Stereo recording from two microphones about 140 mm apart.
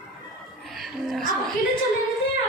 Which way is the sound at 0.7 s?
Centre (ahead or behind).